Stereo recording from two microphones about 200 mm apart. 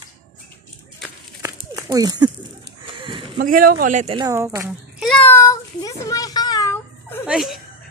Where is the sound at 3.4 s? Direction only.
45° right (ahead or behind).